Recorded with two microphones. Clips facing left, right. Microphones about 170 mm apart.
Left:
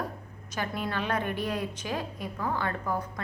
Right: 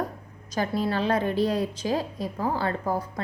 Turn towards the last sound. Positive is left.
turn(degrees=-35)  # may be behind; listen again after turning